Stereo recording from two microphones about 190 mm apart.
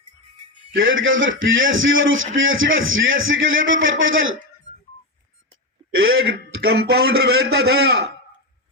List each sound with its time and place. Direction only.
0.8 s a man's voice: 85° right
6.0 s a man's voice: 90° right; by 8.0 s 60° right (ahead or behind)